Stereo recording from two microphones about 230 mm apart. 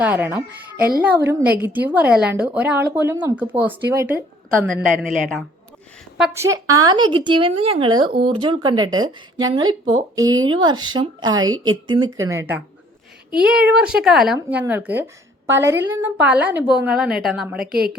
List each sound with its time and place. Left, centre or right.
0.0 s a woman's voice: centre